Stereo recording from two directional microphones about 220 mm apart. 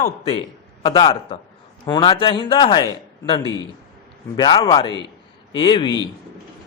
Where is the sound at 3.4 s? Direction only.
20° right (ahead or behind).